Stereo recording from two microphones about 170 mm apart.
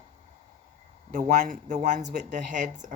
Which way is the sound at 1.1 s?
45° right (ahead or behind).